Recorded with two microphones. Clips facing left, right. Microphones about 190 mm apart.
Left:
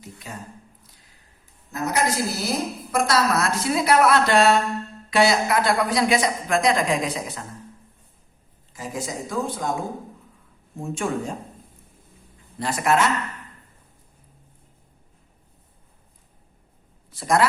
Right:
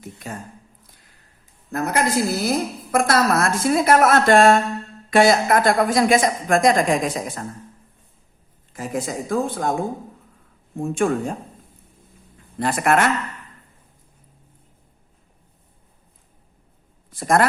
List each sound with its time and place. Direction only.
0.0 s speech: 50° right (ahead or behind)
1.7 s a woman's voice: 55° right (ahead or behind)
8.7 s speech: 55° right (ahead or behind)
10.8 s speech: 55° right (ahead or behind)
12.5 s speech: 55° right (ahead or behind)
17.1 s speech: 50° right (ahead or behind)